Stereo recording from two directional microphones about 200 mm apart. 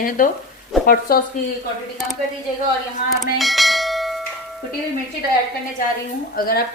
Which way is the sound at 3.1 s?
Centre (ahead or behind).